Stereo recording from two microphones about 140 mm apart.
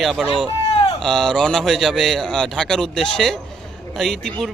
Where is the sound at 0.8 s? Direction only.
45° left (ahead or behind).